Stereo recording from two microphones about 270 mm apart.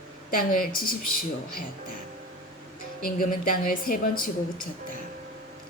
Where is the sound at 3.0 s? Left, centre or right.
Left.